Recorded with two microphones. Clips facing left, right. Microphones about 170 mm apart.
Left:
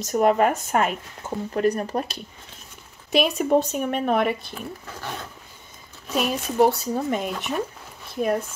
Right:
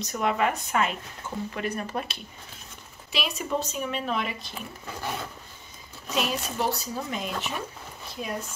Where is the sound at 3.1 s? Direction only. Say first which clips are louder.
Left 10 dB; 50° left (ahead or behind).